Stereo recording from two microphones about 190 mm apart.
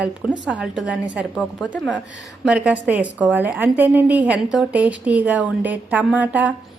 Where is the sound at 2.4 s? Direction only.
5° right (ahead or behind).